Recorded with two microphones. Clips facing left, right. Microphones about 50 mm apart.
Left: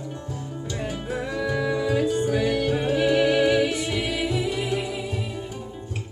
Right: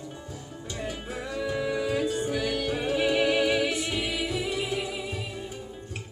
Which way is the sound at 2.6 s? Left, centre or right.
Centre.